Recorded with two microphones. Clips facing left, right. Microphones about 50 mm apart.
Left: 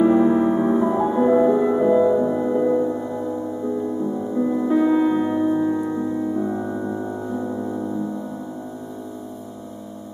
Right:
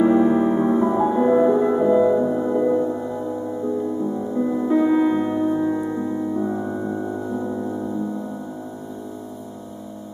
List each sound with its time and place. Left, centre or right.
0.0 s music: centre
2.9 s music: left
4.4 s music: centre